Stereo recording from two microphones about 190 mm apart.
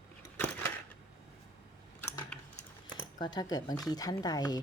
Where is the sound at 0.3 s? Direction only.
10° left (ahead or behind).